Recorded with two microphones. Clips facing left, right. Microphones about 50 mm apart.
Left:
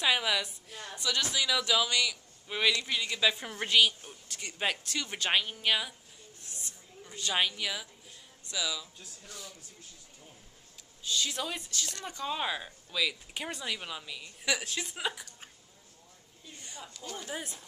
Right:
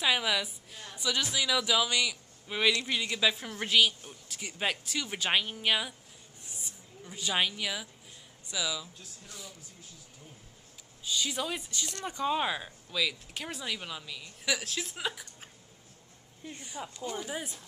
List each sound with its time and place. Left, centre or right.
0.0 s a man's voice: centre
6.4 s a sound: centre
8.5 s a man's voice: centre
11.1 s a man's voice: centre
16.8 s speech: centre
17.2 s speech: centre